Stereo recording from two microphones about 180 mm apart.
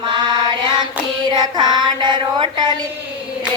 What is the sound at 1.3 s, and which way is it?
Child singing, 25° right (ahead or behind).